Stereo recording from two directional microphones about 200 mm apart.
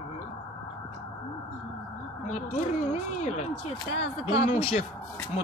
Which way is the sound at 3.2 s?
35° left (ahead or behind).